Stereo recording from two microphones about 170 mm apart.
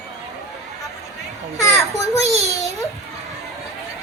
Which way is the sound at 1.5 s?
20° left (ahead or behind).